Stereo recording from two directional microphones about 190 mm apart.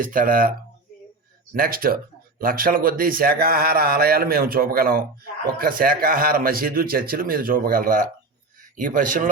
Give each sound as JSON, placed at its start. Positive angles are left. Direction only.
{"t": 0.0, "sound": "a man's voice", "side_deg": -45}
{"t": 1.5, "sound": "a man's voice", "side_deg": -50}